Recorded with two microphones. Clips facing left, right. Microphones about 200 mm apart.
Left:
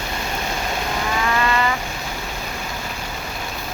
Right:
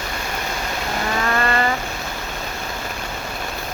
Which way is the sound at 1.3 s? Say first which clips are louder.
Right 1 dB; 45° right (ahead or behind).